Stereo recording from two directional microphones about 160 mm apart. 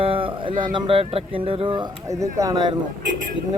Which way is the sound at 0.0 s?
35° right (ahead or behind).